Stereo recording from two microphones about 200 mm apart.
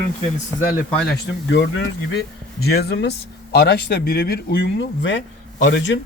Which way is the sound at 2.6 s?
50° left (ahead or behind).